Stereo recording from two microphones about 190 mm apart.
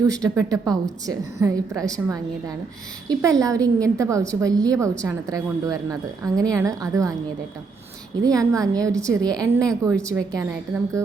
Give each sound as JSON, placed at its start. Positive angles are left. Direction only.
{"t": 0.0, "sound": "a woman's voice", "side_deg": -20}
{"t": 8.2, "sound": "a woman's voice", "side_deg": -20}